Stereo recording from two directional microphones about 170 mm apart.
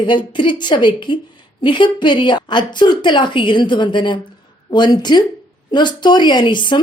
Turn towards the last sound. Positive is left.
turn(degrees=25)  # may be behind; listen again after turning